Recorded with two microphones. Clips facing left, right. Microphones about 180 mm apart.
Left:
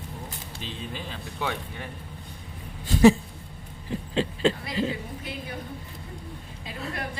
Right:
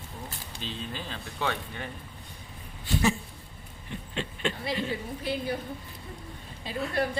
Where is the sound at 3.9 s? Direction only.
30° left (ahead or behind).